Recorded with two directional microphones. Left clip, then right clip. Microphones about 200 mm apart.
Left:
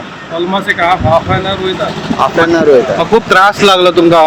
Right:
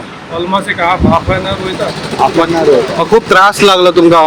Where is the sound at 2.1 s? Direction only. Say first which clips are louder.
Even; 50° right (ahead or behind).